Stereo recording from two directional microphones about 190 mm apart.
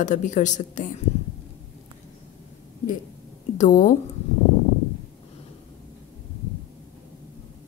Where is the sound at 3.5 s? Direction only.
40° left (ahead or behind).